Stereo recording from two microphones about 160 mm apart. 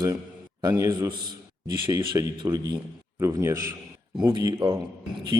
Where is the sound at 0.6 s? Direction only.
20° right (ahead or behind).